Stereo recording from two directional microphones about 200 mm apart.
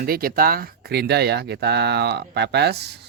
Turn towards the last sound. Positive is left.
turn(degrees=-55)  # may be behind; listen again after turning